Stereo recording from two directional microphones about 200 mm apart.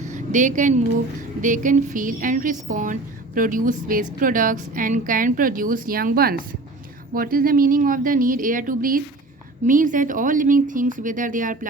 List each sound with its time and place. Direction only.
0.1 s a woman's voice: 35° right (ahead or behind)